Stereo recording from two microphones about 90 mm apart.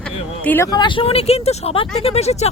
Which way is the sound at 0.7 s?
55° left (ahead or behind).